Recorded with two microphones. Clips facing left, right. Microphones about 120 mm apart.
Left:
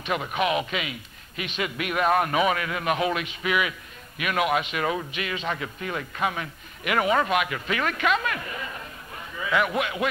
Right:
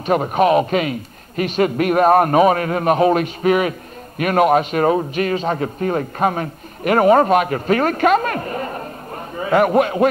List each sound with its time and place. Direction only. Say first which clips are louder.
0.0 s a man's voice: right 10 dB; 40° right (ahead or behind)